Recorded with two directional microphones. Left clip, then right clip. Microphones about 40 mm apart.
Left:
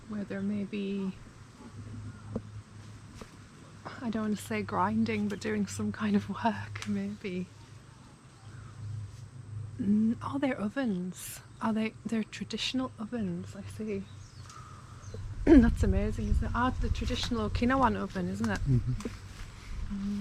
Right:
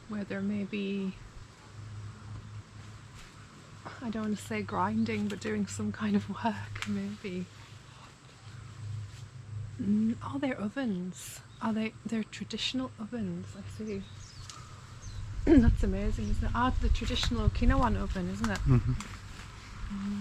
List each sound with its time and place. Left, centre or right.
0.1 s speech: centre
3.8 s speech: left
9.8 s speech: left
10.2 s speech: left
15.4 s speech: left
16.2 s speech: left
17.1 s speech: left
17.8 s speech: left
18.1 s speech: centre
18.4 s speech: centre
19.0 s a sound: centre